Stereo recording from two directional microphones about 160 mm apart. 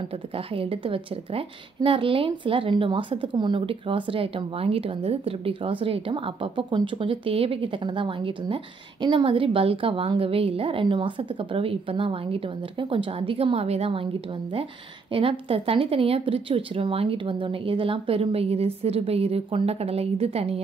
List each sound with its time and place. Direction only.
0.6 s a woman's voice: 35° right (ahead or behind)
15.1 s a woman's voice: 35° right (ahead or behind)